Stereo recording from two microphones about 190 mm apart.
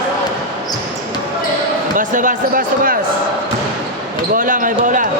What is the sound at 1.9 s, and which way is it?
Speech, 45° right (ahead or behind).